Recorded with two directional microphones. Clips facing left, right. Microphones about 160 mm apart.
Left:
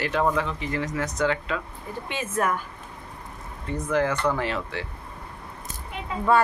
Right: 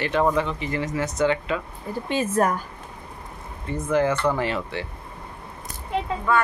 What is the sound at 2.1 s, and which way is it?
Speech, 35° right (ahead or behind).